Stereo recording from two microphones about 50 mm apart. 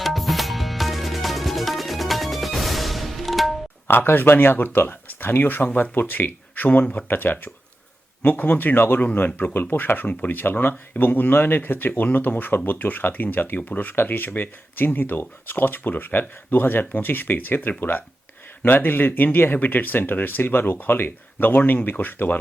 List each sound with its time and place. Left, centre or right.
0.0 s music: centre
3.8 s speech: left
21.8 s speech: left